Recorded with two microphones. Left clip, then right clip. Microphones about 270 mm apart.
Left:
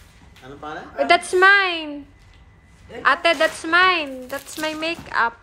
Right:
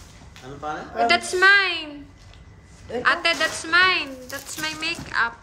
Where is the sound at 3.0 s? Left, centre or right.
Centre.